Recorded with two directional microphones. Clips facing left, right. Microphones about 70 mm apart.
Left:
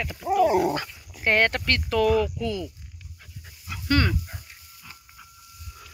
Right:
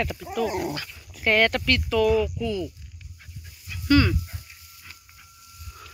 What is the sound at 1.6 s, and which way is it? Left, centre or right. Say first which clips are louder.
Speech: right 1 dB; left.